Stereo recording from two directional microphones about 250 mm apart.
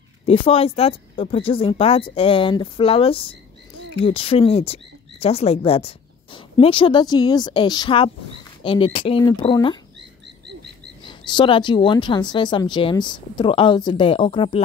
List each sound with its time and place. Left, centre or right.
0.3 s a woman's voice: left
11.1 s a woman's voice: centre